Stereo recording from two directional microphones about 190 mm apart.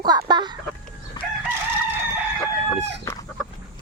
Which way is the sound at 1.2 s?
20° left (ahead or behind).